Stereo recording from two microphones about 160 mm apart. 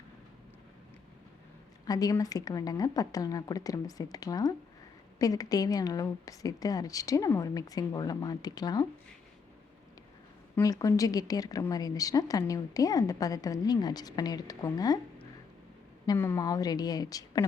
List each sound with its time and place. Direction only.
1.9 s a woman's voice: 20° left (ahead or behind)
10.5 s a woman's voice: 20° left (ahead or behind)
16.1 s a woman's voice: 15° left (ahead or behind)